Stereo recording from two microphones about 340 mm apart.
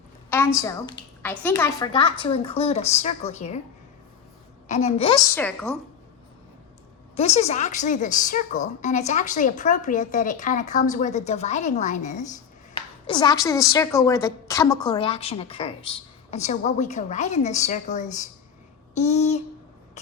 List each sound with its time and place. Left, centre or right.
0.3 s a woman's voice: centre
4.7 s a woman's voice: centre
7.2 s speech: centre